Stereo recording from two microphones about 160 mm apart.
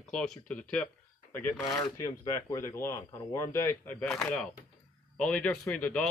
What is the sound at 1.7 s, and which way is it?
Speech, 20° left (ahead or behind).